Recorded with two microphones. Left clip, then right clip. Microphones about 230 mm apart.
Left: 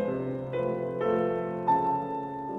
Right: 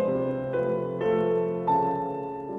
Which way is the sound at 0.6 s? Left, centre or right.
Centre.